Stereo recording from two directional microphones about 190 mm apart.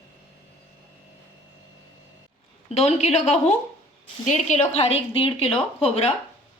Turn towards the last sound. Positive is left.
turn(degrees=35)  # may be behind; listen again after turning